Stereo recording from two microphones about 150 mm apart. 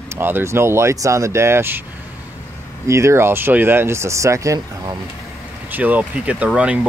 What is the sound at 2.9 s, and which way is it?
Speech, 20° right (ahead or behind).